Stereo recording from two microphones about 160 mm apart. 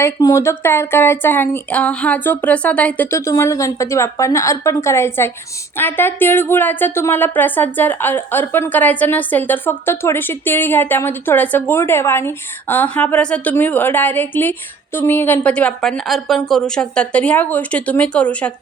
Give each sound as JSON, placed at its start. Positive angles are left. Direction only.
{"t": 0.0, "sound": "a woman's voice", "side_deg": 20}